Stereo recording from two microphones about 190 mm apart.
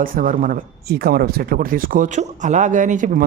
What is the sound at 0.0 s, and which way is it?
Speech, 45° right (ahead or behind).